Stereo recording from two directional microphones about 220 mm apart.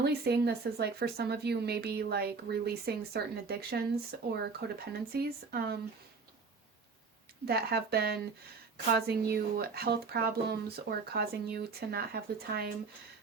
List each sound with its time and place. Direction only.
0.0 s speech: 50° right (ahead or behind)
7.4 s speech: 45° right (ahead or behind)